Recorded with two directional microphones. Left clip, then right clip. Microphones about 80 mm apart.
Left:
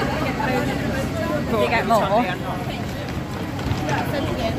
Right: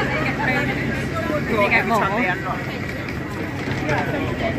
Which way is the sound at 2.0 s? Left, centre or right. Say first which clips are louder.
Left 1 dB; left.